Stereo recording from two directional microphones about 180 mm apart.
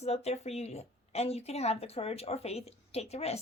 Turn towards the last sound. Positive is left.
turn(degrees=35)  # may be behind; listen again after turning